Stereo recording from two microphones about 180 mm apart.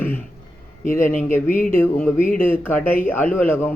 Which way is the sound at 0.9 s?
45° left (ahead or behind).